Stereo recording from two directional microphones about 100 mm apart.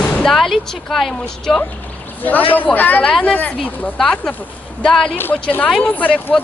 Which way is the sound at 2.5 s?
15° left (ahead or behind).